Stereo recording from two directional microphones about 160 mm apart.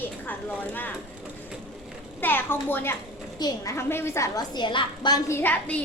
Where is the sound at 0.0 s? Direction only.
10° left (ahead or behind).